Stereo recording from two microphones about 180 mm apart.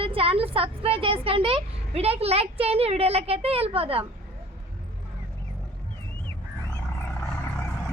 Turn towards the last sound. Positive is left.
turn(degrees=15)  # may be behind; listen again after turning